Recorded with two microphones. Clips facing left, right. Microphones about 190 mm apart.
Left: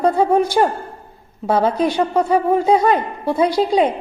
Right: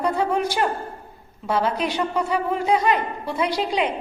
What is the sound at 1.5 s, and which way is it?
Speech, 50° left (ahead or behind).